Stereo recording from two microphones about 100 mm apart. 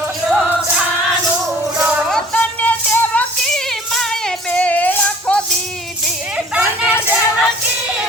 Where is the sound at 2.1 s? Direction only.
10° left (ahead or behind).